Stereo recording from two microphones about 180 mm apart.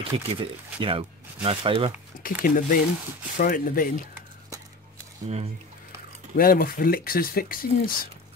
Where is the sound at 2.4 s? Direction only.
50° left (ahead or behind).